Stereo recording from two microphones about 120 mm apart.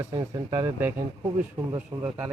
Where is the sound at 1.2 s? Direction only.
35° right (ahead or behind).